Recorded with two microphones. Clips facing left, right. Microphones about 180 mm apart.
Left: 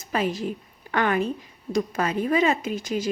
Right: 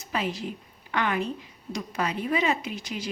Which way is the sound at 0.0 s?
45° left (ahead or behind).